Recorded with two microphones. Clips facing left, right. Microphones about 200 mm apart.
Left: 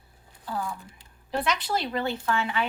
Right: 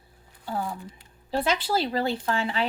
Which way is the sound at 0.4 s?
30° right (ahead or behind).